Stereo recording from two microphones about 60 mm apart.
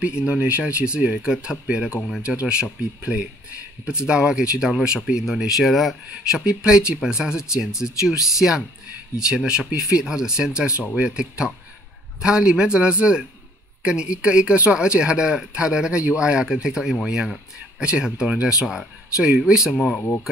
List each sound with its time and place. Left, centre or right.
0.0 s speech: centre
6.0 s speech: centre
19.7 s speech: centre